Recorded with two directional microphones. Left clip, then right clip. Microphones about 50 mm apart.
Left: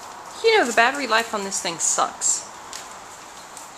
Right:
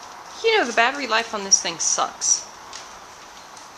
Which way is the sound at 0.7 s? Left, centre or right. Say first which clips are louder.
Left 1 dB; centre.